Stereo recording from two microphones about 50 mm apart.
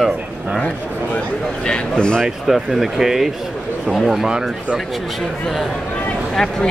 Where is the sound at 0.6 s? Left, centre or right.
Left.